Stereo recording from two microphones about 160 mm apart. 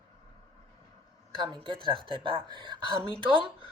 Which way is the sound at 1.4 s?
30° right (ahead or behind).